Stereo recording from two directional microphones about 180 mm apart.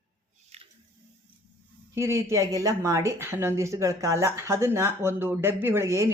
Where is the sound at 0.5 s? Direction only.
35° right (ahead or behind).